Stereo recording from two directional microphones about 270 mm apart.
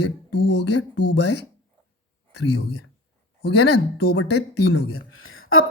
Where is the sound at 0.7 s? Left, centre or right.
Left.